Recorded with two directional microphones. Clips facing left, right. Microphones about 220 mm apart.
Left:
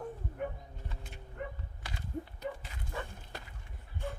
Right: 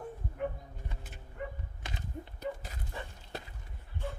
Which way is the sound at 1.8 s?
20° right (ahead or behind).